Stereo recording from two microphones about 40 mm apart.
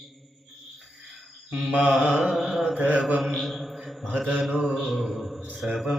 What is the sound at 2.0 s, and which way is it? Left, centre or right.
Carnatic music, centre.